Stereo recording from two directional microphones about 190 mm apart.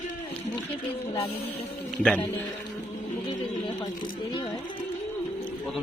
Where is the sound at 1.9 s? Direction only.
5° left (ahead or behind).